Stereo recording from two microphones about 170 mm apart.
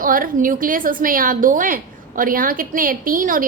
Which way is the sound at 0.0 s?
55° right (ahead or behind).